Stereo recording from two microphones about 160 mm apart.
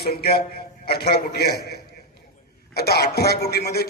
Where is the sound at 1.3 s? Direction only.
90° left.